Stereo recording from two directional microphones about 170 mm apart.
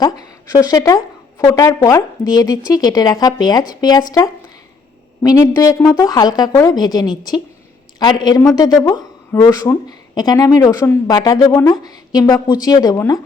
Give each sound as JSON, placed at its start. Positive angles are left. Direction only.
{"t": 0.0, "sound": "a woman's voice", "side_deg": 20}
{"t": 5.2, "sound": "a woman's voice", "side_deg": 20}